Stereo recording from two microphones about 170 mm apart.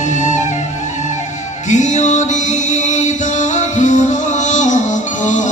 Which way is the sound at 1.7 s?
45° left (ahead or behind).